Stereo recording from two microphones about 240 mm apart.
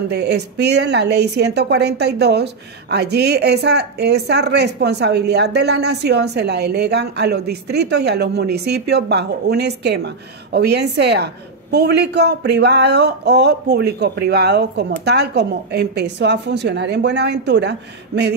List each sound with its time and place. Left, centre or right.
0.1 s speech: right